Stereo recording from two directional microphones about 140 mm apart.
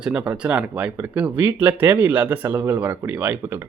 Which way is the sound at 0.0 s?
10° right (ahead or behind).